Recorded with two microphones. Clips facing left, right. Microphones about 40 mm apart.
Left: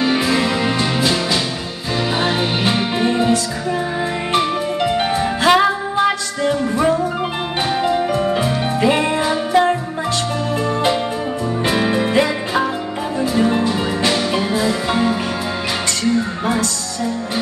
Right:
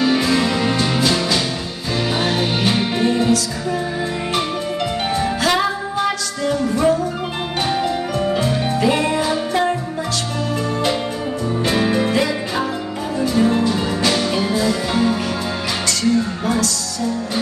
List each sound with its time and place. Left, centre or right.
0.0 s music: centre
4.4 s music: centre
16.4 s music: left